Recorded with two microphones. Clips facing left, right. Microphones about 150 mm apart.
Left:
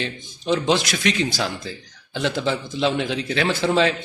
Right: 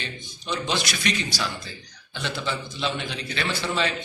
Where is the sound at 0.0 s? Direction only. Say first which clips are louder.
Left 8 dB; 90° left.